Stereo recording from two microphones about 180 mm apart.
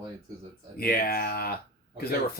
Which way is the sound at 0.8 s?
55° left (ahead or behind).